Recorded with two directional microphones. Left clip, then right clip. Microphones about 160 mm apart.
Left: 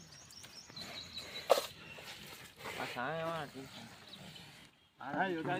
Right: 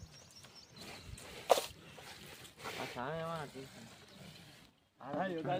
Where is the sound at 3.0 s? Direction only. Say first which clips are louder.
Left 3 dB; 70° right (ahead or behind); by 3.5 s 85° right.